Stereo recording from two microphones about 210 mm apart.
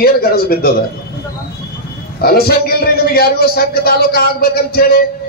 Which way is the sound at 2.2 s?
45° left (ahead or behind).